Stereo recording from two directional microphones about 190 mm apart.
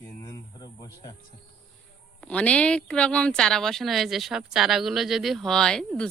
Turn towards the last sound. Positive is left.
turn(degrees=5)  # may be behind; listen again after turning